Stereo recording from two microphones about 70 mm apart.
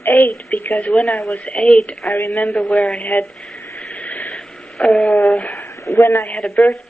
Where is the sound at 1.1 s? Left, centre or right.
Centre.